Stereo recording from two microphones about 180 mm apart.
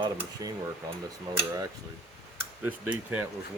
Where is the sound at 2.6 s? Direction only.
10° right (ahead or behind).